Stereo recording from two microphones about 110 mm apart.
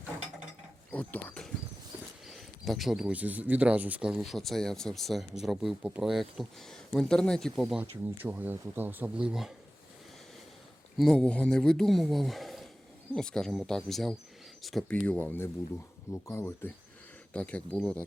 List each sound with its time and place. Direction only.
0.9 s speech: 15° left (ahead or behind)
2.2 s speech: centre (ahead or behind)
7.8 s speech: 15° right (ahead or behind)
10.9 s speech: 5° left (ahead or behind); by 16.7 s 25° left (ahead or behind)
17.3 s speech: 10° left (ahead or behind)